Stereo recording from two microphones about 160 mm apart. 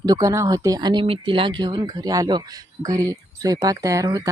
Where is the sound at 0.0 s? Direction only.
20° right (ahead or behind).